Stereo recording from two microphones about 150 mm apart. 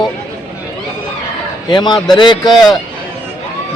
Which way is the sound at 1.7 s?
30° left (ahead or behind).